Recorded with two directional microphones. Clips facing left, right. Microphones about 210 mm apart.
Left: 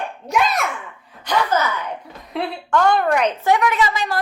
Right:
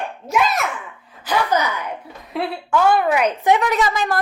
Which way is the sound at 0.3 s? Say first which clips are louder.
Even; centre (ahead or behind).